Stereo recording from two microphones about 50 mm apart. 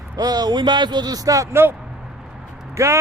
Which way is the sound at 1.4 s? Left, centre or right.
Right.